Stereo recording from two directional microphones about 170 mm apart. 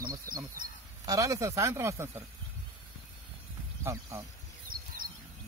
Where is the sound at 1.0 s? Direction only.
20° right (ahead or behind).